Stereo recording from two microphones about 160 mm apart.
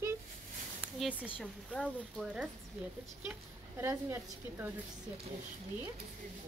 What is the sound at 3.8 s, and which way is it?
Speech, 15° right (ahead or behind).